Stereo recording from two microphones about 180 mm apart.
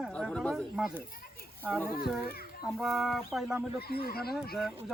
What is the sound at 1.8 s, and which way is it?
Speech, 50° left (ahead or behind).